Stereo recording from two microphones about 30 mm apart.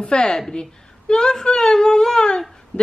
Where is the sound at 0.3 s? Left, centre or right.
Centre.